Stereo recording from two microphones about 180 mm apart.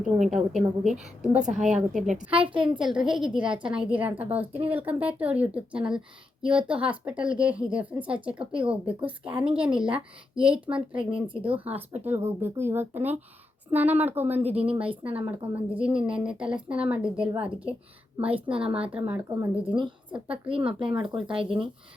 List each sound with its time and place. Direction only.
0.3 s a woman's voice: 5° right (ahead or behind)
1.4 s a woman's voice: 45° right (ahead or behind)
1.6 s a woman's voice: 5° right (ahead or behind)
11.1 s speech: 30° right (ahead or behind)
11.6 s speech: 10° right (ahead or behind)
14.5 s speech: 35° right (ahead or behind)
15.1 s a woman's voice: 10° right (ahead or behind)
18.4 s speech: 30° right (ahead or behind)
19.1 s speech: 10° right (ahead or behind)
19.7 s speech: 25° right (ahead or behind)